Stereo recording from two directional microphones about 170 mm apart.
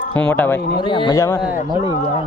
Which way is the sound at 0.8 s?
25° left (ahead or behind).